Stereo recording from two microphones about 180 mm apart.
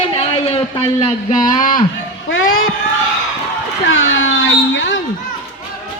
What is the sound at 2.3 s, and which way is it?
Speech, 90° left.